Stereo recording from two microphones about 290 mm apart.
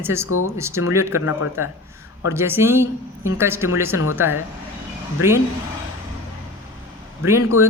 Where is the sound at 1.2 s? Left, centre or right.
Left.